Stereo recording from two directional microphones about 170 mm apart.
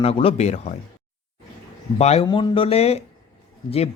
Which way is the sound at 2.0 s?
40° left (ahead or behind).